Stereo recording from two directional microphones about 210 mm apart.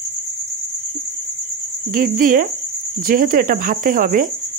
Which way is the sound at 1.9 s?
40° right (ahead or behind).